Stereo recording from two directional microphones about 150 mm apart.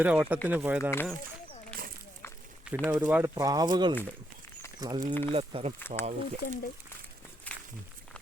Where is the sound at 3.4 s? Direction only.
25° right (ahead or behind).